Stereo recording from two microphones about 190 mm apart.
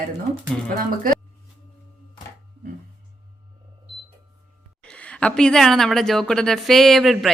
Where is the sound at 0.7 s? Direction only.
50° right (ahead or behind).